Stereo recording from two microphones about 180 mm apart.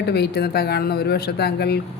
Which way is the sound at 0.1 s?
65° left (ahead or behind).